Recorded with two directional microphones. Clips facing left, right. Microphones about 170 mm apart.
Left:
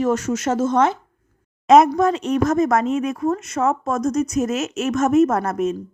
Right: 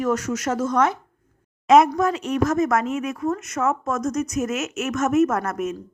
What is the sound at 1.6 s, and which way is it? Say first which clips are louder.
Speech: left 3 dB; 40° left (ahead or behind).